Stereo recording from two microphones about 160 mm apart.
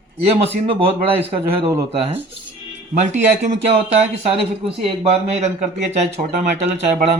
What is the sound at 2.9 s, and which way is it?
Speech, 50° right (ahead or behind).